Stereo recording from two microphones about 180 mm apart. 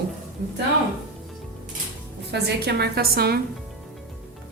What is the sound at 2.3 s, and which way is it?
A woman's voice, 65° right (ahead or behind).